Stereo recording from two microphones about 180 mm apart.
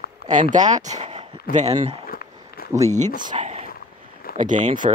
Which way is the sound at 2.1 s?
55° left (ahead or behind).